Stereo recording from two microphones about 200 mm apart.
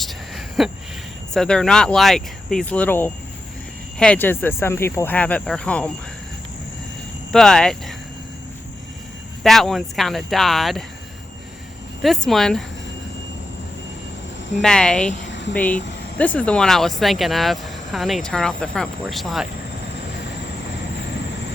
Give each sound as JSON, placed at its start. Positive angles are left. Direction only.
{"t": 0.0, "sound": "a sound", "side_deg": 0}
{"t": 1.3, "sound": "speech", "side_deg": 5}
{"t": 7.3, "sound": "speech", "side_deg": 5}
{"t": 9.4, "sound": "speech", "side_deg": 0}
{"t": 12.0, "sound": "speech", "side_deg": 0}
{"t": 14.6, "sound": "speech", "side_deg": 5}
{"t": 15.3, "sound": "a sound", "side_deg": 65}
{"t": 15.5, "sound": "speech", "side_deg": 5}